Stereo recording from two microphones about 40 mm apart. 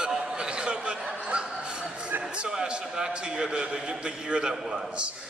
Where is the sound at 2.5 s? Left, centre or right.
Centre.